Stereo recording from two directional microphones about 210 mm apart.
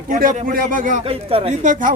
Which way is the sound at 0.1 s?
40° right (ahead or behind).